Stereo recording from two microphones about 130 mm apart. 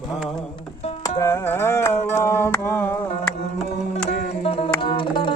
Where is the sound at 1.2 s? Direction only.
20° left (ahead or behind).